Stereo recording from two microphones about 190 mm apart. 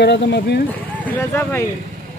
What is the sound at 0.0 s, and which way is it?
Speech, 65° left (ahead or behind).